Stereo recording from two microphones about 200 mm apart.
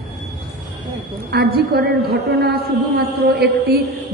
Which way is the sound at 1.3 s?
50° right (ahead or behind).